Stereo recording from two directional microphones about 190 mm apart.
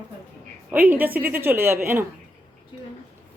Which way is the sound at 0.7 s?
10° right (ahead or behind).